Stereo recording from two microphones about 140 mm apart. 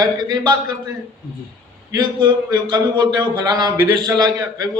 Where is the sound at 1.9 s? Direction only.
30° right (ahead or behind).